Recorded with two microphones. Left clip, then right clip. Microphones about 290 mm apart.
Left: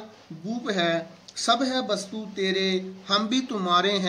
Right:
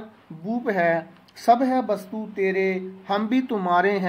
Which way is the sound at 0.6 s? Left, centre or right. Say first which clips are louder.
Right 4 dB; centre.